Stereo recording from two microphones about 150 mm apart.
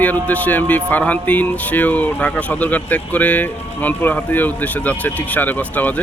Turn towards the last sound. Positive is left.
turn(degrees=10)  # may be behind; listen again after turning